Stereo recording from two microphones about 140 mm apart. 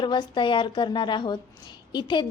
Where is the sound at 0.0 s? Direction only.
35° left (ahead or behind).